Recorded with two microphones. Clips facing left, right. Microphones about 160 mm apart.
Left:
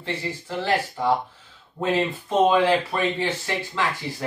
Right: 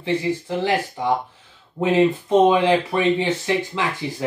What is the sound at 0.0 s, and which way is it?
Speech, 15° right (ahead or behind).